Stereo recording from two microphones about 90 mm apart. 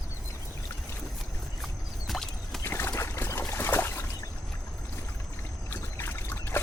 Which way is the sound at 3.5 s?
25° left (ahead or behind).